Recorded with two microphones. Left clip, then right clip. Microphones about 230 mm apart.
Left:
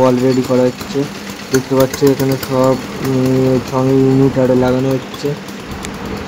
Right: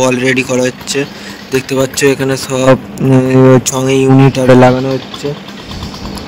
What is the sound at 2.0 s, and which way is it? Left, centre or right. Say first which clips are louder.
Speech: right 2 dB; right.